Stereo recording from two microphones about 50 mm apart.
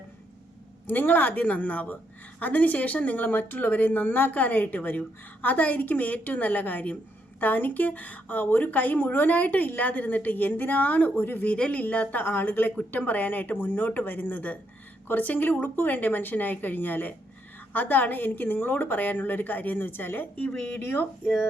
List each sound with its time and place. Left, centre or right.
0.9 s speech: left
11.5 s speech: left
12.2 s speech: left